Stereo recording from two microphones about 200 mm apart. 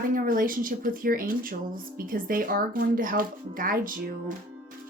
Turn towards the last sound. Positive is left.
turn(degrees=-45)  # may be behind; listen again after turning